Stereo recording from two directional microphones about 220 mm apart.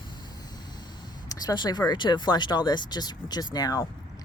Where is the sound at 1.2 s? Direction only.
20° left (ahead or behind).